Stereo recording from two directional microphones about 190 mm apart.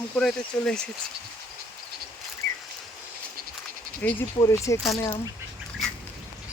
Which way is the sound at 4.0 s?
15° left (ahead or behind).